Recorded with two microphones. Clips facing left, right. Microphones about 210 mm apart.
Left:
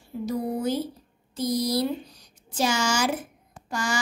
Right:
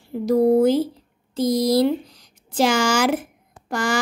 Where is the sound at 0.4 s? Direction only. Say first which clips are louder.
Right 16 dB; 50° right (ahead or behind).